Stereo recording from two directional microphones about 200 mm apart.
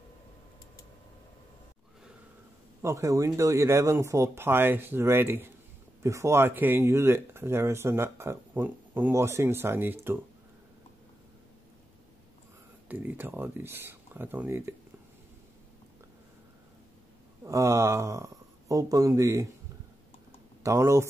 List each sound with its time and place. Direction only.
2.8 s speech: 15° right (ahead or behind)
12.8 s speech: 10° right (ahead or behind)
17.4 s speech: 15° right (ahead or behind)
20.6 s speech: 15° right (ahead or behind)